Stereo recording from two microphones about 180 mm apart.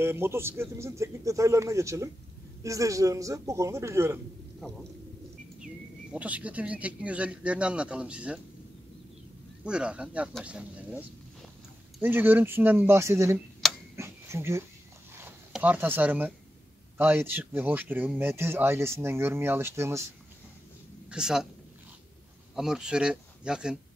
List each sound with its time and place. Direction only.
0.0 s speech: 15° right (ahead or behind)
6.1 s speech: 10° right (ahead or behind)
9.7 s speech: 5° right (ahead or behind)
13.6 s tick-tock: centre (ahead or behind)
13.9 s a sound: 15° right (ahead or behind)
15.5 s speech: 10° right (ahead or behind)
21.1 s speech: 5° right (ahead or behind)
22.6 s speech: 5° right (ahead or behind)